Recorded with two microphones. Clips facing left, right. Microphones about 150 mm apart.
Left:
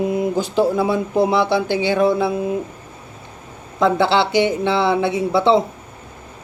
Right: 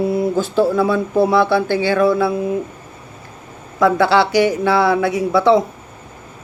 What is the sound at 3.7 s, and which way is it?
Speech, 25° left (ahead or behind).